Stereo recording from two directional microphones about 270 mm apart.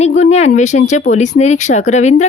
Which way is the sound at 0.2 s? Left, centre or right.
Left.